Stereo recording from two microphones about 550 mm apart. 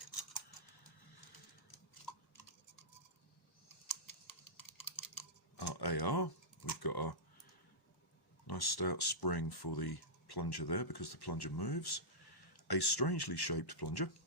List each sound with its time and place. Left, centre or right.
0.0 s a sound: left
3.8 s typing: left
8.4 s speech: left